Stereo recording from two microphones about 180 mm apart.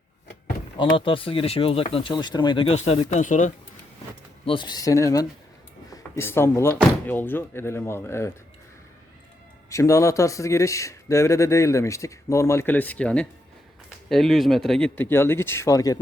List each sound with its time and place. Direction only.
0.8 s speech: 30° left (ahead or behind)
4.4 s speech: 25° left (ahead or behind)
9.6 s speech: 20° left (ahead or behind)